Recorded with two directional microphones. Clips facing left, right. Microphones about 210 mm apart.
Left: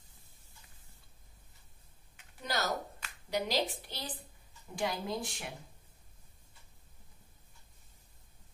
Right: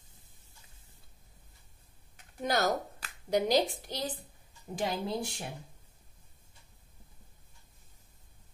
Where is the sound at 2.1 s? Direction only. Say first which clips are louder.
Right 6 dB; 50° right (ahead or behind).